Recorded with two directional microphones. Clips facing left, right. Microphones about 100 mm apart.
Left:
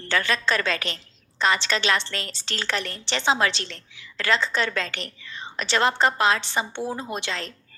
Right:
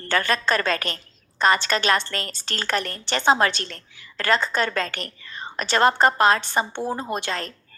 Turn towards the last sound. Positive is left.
turn(degrees=-45)  # may be behind; listen again after turning